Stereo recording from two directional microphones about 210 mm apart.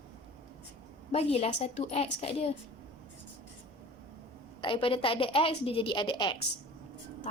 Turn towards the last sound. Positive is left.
turn(degrees=20)  # may be behind; listen again after turning